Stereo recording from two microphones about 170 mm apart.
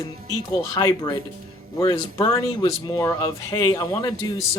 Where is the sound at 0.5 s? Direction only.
20° left (ahead or behind).